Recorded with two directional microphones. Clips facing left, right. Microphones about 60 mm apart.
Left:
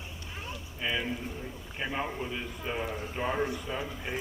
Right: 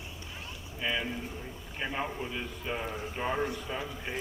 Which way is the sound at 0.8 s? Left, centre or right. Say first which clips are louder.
Even; centre.